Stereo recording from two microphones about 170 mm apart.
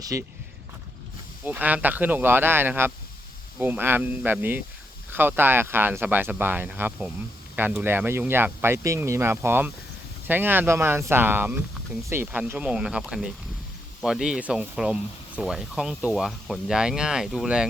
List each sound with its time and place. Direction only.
0.0 s speech: 20° right (ahead or behind)
1.5 s speech: 10° right (ahead or behind)